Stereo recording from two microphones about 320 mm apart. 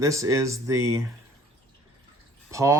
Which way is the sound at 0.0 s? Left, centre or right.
Centre.